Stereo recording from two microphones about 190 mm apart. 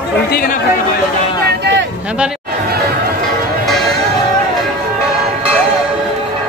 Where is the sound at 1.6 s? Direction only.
65° right (ahead or behind).